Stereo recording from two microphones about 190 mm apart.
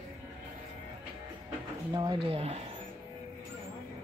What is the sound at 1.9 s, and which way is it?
Speech, 25° right (ahead or behind).